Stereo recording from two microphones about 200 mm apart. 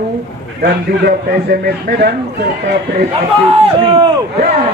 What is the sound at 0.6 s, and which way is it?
A man's voice, 50° right (ahead or behind).